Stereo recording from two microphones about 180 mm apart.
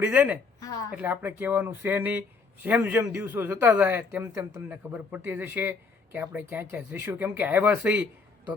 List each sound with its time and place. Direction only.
0.0 s speech: 10° right (ahead or behind)
0.6 s a sound: 20° left (ahead or behind)
0.9 s speech: 10° right (ahead or behind)